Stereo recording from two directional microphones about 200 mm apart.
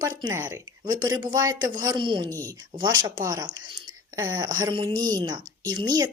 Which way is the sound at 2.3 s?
10° left (ahead or behind).